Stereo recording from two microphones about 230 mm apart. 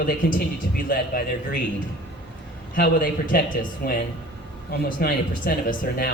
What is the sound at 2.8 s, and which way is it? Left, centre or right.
Speech, left.